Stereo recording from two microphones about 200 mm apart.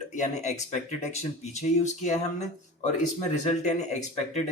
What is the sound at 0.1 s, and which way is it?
Speech, 35° left (ahead or behind).